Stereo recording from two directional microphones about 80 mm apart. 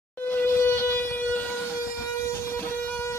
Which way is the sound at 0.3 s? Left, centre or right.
Left.